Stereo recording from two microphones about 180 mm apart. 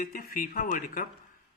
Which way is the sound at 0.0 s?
55° left (ahead or behind).